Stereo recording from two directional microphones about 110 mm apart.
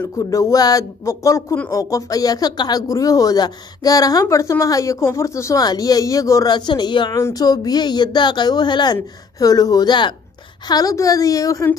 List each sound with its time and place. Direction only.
0.3 s speech: 30° left (ahead or behind)
6.5 s speech: 40° left (ahead or behind)
7.2 s speech: 30° left (ahead or behind)
10.7 s speech: 35° left (ahead or behind)